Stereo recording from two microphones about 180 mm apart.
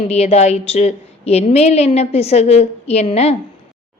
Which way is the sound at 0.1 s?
35° left (ahead or behind).